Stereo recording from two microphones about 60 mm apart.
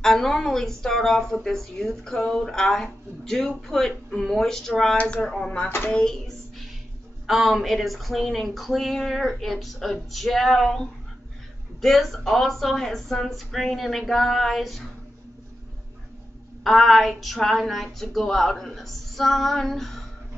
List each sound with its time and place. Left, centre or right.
0.0 s a woman's voice: centre
7.2 s speech: centre
16.6 s speech: centre